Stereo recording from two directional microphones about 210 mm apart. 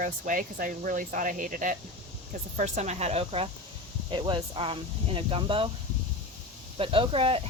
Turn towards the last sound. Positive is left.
turn(degrees=-25)  # may be behind; listen again after turning